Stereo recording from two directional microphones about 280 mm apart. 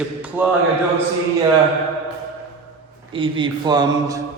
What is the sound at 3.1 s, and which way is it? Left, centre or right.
A man's voice, centre.